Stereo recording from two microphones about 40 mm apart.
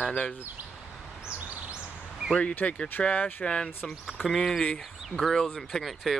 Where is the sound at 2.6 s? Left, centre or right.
Left.